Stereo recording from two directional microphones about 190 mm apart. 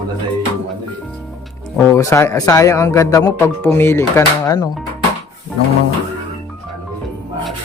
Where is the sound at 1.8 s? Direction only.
15° left (ahead or behind).